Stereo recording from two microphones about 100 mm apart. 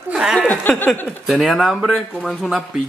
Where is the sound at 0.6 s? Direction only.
20° left (ahead or behind).